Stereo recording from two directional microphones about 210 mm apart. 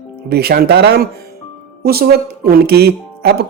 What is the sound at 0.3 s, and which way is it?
Speech, 50° right (ahead or behind).